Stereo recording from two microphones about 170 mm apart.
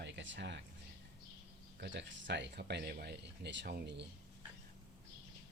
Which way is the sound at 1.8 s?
90° right.